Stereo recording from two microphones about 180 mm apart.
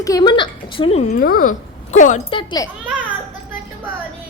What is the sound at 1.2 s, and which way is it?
Speech, 50° left (ahead or behind).